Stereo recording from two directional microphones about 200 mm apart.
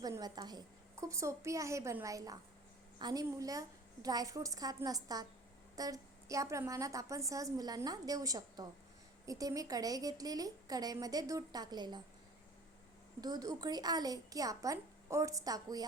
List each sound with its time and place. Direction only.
0.0 s a woman's voice: 20° right (ahead or behind)
13.2 s a woman's voice: 20° right (ahead or behind)